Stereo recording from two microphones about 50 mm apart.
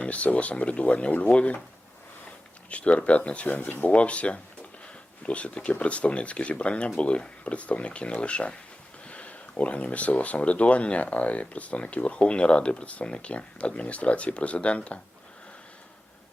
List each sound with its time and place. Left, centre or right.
0.0 s speech: left
2.6 s speech: left
3.4 s speech: left
3.9 s speech: left